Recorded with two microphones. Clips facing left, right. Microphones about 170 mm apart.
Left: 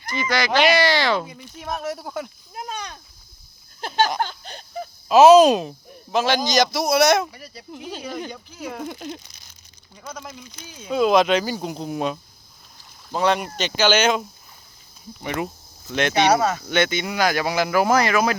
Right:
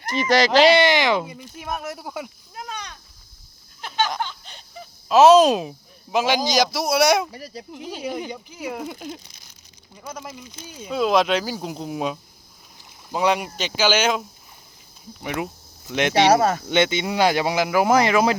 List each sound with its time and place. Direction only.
0.3 s speech: 35° right (ahead or behind)
1.2 s speech: 5° right (ahead or behind)
2.6 s a sound: 30° left (ahead or behind)
5.0 s speech: centre (ahead or behind)
7.3 s speech: 40° right (ahead or behind)
8.0 s speech: 15° right (ahead or behind)
15.9 s speech: 15° right (ahead or behind)